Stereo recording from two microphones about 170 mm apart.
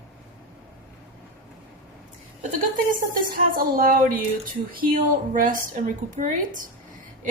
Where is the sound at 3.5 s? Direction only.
55° right (ahead or behind).